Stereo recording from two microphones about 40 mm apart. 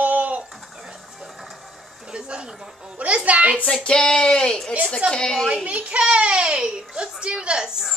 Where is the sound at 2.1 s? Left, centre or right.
Right.